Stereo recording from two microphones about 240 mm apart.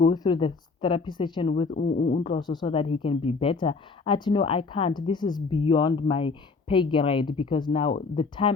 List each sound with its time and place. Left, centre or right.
0.0 s a woman's voice: centre
1.7 s speech: left
2.2 s a woman's voice: centre